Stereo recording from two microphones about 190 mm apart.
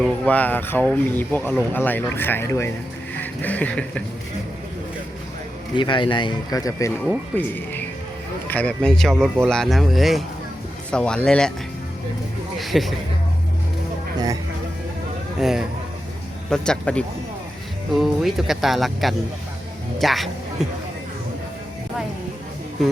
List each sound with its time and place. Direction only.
0.0 s speech: 5° left (ahead or behind)
5.7 s speech: 25° left (ahead or behind); by 11.5 s 5° left (ahead or behind)
12.5 s a sound: centre (ahead or behind)
15.4 s speech: centre (ahead or behind)
18.0 s speech: centre (ahead or behind)